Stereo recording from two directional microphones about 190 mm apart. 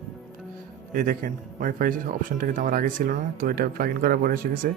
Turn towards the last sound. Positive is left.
turn(degrees=-45)  # may be behind; listen again after turning